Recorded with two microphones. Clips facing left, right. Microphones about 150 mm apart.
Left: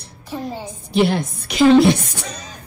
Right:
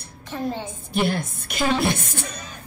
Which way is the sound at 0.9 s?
50° right (ahead or behind).